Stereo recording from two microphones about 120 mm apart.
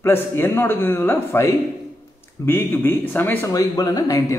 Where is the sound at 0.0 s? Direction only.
20° left (ahead or behind).